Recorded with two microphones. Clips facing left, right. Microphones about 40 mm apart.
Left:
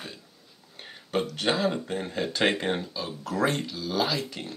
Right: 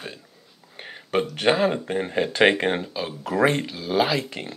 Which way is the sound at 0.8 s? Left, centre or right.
Right.